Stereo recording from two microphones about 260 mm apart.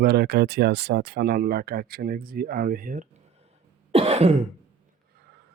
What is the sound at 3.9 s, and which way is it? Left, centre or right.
Throat clearing, right.